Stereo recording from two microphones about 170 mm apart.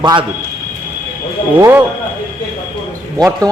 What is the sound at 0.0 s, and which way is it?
Speech, 25° right (ahead or behind).